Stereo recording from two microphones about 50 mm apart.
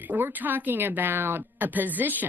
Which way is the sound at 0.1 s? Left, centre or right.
Right.